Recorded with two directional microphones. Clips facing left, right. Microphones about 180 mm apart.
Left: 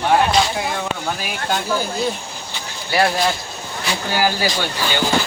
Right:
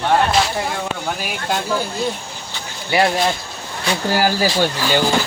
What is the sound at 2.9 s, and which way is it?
Speech, 20° right (ahead or behind).